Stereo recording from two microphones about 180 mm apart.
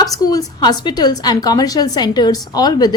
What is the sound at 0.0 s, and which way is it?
A woman's voice, 20° left (ahead or behind).